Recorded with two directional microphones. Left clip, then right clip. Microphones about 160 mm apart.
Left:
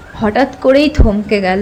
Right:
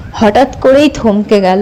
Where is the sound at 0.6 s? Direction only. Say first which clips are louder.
Right 1 dB; 20° right (ahead or behind).